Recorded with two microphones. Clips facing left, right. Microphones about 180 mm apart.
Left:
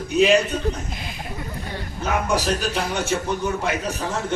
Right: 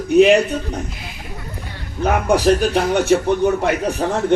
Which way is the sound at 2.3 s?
60° right (ahead or behind).